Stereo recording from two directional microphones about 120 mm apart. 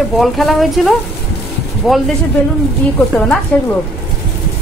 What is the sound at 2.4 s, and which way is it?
Speech, 20° left (ahead or behind).